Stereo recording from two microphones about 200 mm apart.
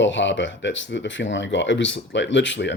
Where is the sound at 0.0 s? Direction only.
65° left (ahead or behind).